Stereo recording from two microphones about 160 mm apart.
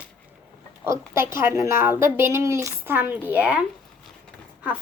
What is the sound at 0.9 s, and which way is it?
A woman's voice, 15° right (ahead or behind).